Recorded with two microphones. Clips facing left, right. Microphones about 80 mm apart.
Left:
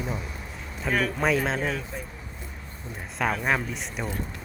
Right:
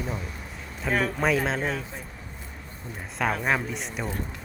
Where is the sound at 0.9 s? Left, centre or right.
Right.